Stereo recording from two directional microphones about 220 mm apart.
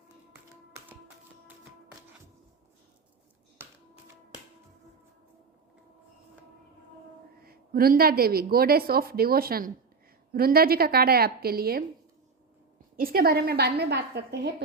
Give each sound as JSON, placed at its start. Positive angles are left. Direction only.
{"t": 0.9, "sound": "music", "side_deg": -10}
{"t": 7.4, "sound": "a woman's voice", "side_deg": -45}
{"t": 13.0, "sound": "a woman's voice", "side_deg": -40}